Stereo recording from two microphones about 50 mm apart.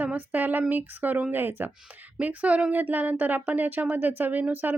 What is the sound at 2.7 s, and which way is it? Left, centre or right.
Speech, right.